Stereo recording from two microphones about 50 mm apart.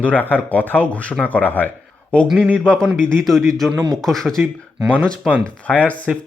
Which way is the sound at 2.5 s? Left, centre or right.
Left.